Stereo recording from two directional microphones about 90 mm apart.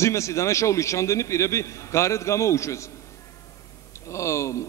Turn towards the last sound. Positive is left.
turn(degrees=35)  # may be behind; listen again after turning